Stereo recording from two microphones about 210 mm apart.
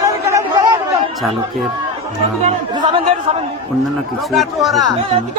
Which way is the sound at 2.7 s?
20° right (ahead or behind).